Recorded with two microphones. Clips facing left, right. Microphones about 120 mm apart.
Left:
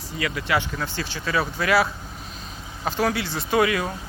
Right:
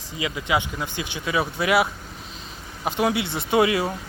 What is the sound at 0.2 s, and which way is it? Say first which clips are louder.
Speech: even; 15° right (ahead or behind).